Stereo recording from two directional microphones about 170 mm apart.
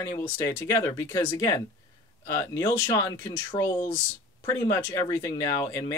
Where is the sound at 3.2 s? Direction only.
30° left (ahead or behind).